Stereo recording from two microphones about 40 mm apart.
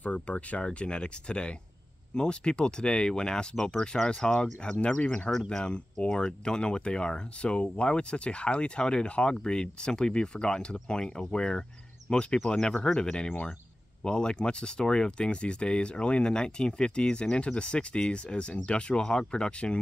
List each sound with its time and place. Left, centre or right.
0.0 s speech: left
5.3 s speech: centre
5.6 s speech: left